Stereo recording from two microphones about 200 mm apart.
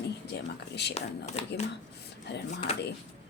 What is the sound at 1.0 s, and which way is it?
Speech, 35° left (ahead or behind).